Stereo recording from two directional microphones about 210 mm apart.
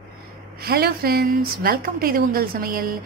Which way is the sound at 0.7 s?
45° right (ahead or behind).